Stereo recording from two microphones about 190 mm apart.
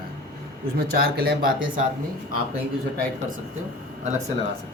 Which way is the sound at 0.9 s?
55° right (ahead or behind).